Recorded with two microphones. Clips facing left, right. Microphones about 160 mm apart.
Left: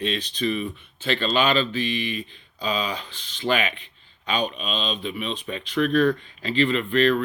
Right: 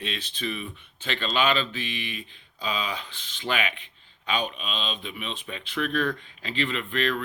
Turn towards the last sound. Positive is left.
turn(degrees=35)  # may be behind; listen again after turning